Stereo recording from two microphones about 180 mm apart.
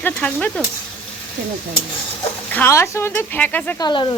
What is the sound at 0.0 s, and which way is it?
Speech, 5° left (ahead or behind).